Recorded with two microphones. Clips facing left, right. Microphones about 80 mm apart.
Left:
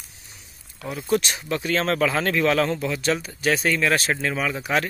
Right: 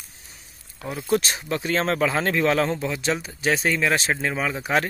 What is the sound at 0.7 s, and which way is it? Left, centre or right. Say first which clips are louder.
Speech: even; right.